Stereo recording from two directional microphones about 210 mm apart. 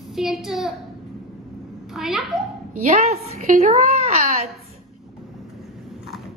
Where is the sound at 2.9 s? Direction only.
30° right (ahead or behind).